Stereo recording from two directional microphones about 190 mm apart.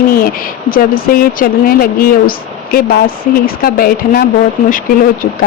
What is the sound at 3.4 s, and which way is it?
Speech, 50° left (ahead or behind).